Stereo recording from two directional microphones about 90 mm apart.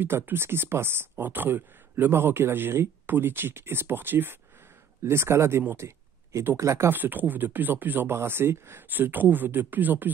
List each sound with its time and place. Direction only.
0.0 s speech: 25° right (ahead or behind)